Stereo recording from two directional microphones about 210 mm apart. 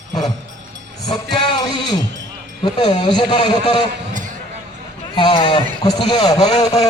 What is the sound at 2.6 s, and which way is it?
A man's voice, 20° left (ahead or behind).